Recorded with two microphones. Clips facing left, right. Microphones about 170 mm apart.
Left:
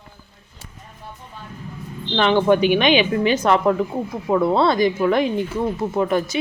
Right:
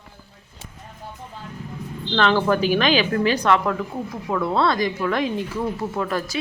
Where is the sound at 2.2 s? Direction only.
15° left (ahead or behind).